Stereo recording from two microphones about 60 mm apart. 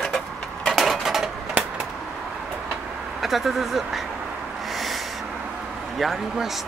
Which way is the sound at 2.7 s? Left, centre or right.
Centre.